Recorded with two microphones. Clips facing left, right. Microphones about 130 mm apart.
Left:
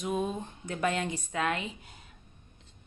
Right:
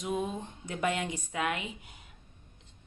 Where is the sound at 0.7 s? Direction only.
15° right (ahead or behind).